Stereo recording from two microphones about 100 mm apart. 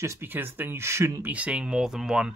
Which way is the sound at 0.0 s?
25° right (ahead or behind).